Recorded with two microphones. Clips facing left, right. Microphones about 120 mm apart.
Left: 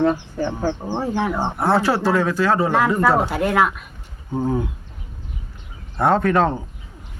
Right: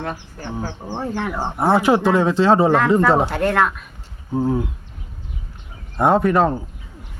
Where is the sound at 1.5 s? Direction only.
15° right (ahead or behind).